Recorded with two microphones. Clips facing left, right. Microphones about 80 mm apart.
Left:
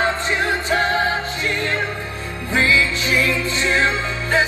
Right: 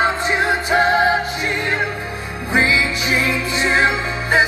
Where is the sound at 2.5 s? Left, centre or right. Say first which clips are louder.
Right 1 dB; centre.